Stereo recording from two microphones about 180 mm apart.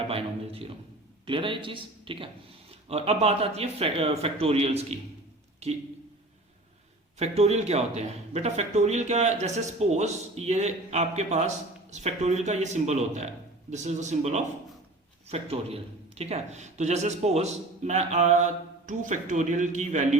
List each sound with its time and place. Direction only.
0.1 s a man's voice: 30° right (ahead or behind)
7.2 s a man's voice: 35° right (ahead or behind)